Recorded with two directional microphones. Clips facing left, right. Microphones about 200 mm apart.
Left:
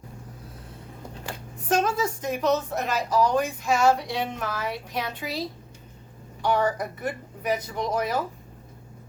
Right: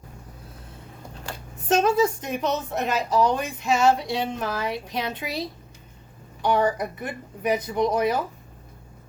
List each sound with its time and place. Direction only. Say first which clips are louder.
1.6 s a woman's voice: right 4 dB; 25° right (ahead or behind)